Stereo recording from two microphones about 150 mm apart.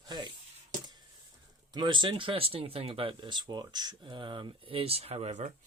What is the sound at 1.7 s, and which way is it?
Speech, 30° right (ahead or behind).